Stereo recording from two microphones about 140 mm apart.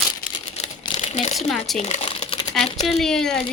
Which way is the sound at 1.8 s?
50° left (ahead or behind).